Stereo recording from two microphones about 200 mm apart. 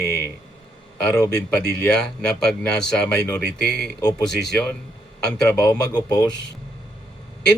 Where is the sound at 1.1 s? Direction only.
15° left (ahead or behind).